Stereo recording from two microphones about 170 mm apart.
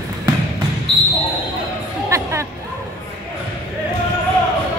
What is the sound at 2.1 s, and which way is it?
Music, 15° right (ahead or behind).